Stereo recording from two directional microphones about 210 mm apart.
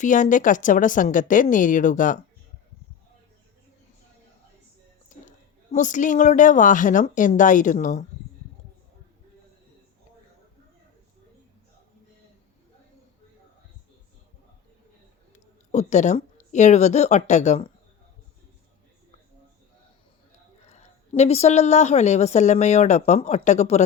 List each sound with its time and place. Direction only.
0.0 s a woman's voice: 35° left (ahead or behind)
5.7 s a woman's voice: 35° left (ahead or behind)
15.7 s a woman's voice: 35° left (ahead or behind)
20.7 s a woman's voice: 30° left (ahead or behind)